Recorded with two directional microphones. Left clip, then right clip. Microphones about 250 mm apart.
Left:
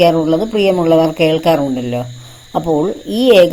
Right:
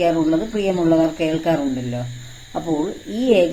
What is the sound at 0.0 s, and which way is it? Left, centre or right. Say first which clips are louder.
A woman's voice: left 7 dB; left.